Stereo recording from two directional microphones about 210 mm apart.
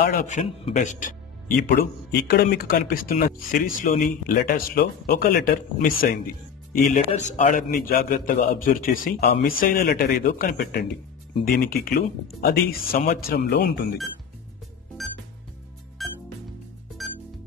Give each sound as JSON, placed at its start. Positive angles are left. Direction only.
{"t": 0.0, "sound": "a man's voice", "side_deg": 45}
{"t": 1.8, "sound": "a man's voice", "side_deg": 45}
{"t": 15.0, "sound": "music", "side_deg": 0}